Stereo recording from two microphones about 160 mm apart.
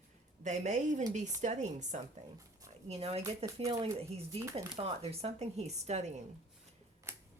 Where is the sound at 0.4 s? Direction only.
50° right (ahead or behind).